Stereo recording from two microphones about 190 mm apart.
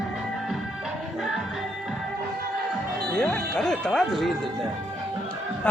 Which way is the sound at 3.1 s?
5° left (ahead or behind).